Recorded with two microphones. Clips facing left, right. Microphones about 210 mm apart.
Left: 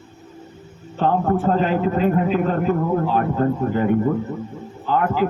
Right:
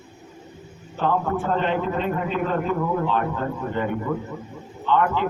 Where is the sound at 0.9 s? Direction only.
35° left (ahead or behind).